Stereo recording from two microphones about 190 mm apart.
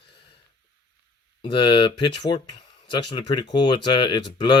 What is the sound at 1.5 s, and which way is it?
Speech, 25° left (ahead or behind).